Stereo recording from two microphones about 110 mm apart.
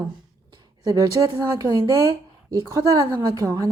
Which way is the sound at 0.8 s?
35° right (ahead or behind).